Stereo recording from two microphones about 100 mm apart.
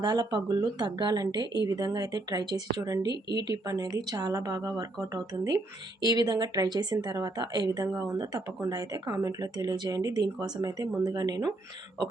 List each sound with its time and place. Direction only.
0.0 s speech: 45° right (ahead or behind)